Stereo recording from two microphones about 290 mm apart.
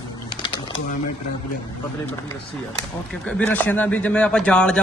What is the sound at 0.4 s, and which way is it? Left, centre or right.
Bird, centre.